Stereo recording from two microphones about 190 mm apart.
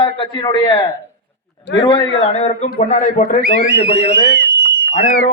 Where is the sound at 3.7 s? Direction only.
55° right (ahead or behind).